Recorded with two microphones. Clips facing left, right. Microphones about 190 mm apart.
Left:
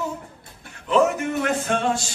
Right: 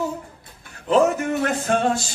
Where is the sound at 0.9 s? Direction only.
40° right (ahead or behind).